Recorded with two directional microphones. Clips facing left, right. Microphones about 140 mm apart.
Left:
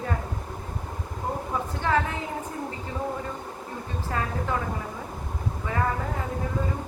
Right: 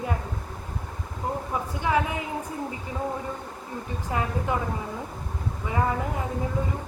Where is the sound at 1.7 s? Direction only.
10° right (ahead or behind).